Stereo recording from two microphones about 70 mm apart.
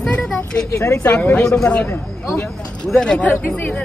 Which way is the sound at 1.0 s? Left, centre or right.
Centre.